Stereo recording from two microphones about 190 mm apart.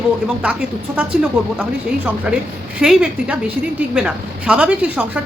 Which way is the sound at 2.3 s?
5° right (ahead or behind).